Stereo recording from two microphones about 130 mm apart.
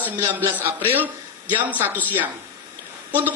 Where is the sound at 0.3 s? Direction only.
15° right (ahead or behind).